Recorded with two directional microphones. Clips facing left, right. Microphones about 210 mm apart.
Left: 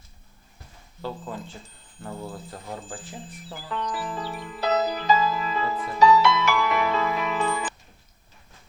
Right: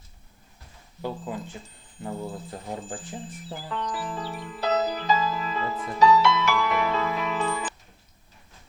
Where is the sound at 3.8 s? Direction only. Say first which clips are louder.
Left 2 dB; 10° left (ahead or behind).